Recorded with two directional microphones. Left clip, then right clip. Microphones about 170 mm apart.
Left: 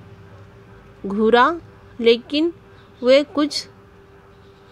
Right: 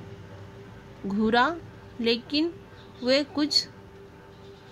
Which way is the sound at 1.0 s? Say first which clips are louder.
Left 8 dB; 35° left (ahead or behind).